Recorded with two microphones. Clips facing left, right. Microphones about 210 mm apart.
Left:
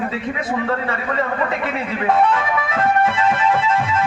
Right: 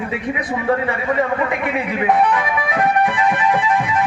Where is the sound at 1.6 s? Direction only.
15° right (ahead or behind).